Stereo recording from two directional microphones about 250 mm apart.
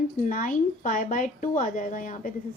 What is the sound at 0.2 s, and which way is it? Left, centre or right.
Speech, left.